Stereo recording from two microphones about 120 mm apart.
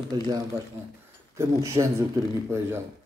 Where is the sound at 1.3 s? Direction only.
25° right (ahead or behind).